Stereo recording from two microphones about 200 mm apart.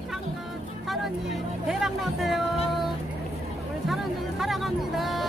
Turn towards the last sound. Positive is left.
turn(degrees=0)  # may be behind; listen again after turning